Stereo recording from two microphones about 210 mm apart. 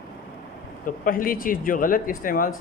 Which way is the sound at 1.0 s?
40° left (ahead or behind).